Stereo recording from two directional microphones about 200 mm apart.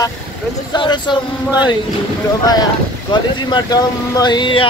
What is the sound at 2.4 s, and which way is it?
Speech, 20° left (ahead or behind).